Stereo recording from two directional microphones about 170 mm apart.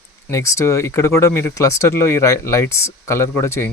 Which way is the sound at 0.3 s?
15° left (ahead or behind).